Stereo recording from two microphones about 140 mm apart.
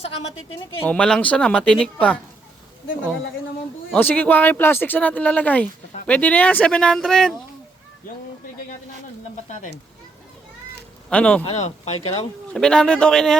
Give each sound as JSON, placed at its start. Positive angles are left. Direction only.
{"t": 0.9, "sound": "speech", "side_deg": 10}
{"t": 3.9, "sound": "speech", "side_deg": 10}
{"t": 9.3, "sound": "speech", "side_deg": 60}
{"t": 11.1, "sound": "speech", "side_deg": 10}
{"t": 11.4, "sound": "speech", "side_deg": 50}
{"t": 12.5, "sound": "speech", "side_deg": 5}